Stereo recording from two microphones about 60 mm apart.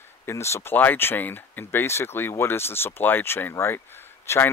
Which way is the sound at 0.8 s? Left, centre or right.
Left.